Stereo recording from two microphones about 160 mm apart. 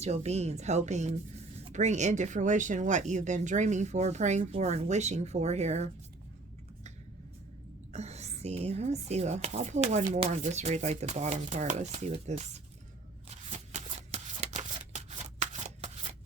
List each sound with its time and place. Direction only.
0.0 s speech: 45° right (ahead or behind)
7.9 s speech: 45° right (ahead or behind)
13.2 s shuffling cards: 45° right (ahead or behind)